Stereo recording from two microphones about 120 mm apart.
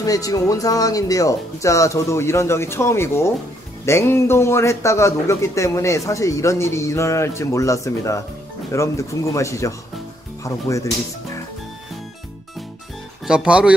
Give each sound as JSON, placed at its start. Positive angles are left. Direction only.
{"t": 0.0, "sound": "a man's voice", "side_deg": 30}
{"t": 13.3, "sound": "speech", "side_deg": -10}